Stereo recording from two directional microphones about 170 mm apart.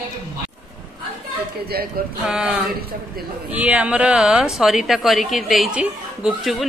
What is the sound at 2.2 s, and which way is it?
Speech, 5° right (ahead or behind).